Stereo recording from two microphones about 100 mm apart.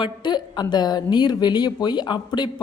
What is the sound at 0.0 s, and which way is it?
A woman's voice, 50° left (ahead or behind).